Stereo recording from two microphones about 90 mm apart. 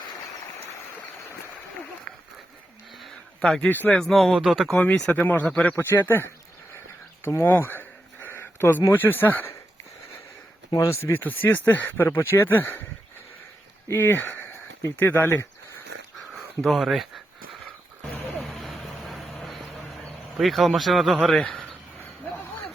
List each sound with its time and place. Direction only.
3.0 s a sound: 5° left (ahead or behind)
3.7 s speech: 20° left (ahead or behind)
3.9 s speech: centre (ahead or behind)
4.8 s speech: 15° left (ahead or behind)
5.7 s speech: 25° left (ahead or behind)
6.7 s a sound: 30° left (ahead or behind)
11.0 s speech: 20° left (ahead or behind)
13.8 s speech: 30° left (ahead or behind)
16.3 s speech: centre (ahead or behind)
18.3 s vehicle: centre (ahead or behind)
20.3 s speech: centre (ahead or behind)